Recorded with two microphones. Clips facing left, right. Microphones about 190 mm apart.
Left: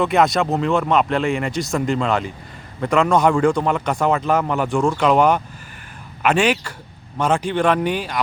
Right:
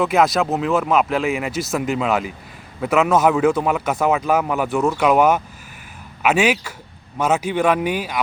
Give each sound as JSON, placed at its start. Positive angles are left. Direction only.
{"t": 0.0, "sound": "a man's voice", "side_deg": 0}